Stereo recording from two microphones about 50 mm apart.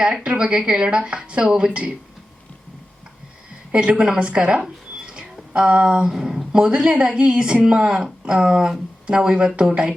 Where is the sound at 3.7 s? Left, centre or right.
Centre.